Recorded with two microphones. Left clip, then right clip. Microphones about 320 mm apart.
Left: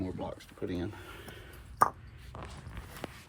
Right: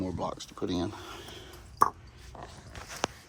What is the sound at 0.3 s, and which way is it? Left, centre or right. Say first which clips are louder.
Speech: right 4 dB; centre.